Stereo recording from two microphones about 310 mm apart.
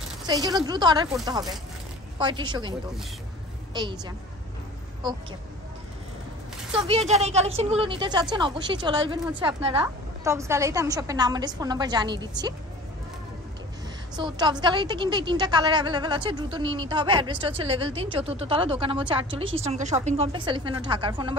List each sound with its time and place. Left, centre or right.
0.3 s a woman's voice: centre
2.1 s a woman's voice: centre
3.7 s a woman's voice: centre
7.1 s a woman's voice: right
14.1 s a woman's voice: centre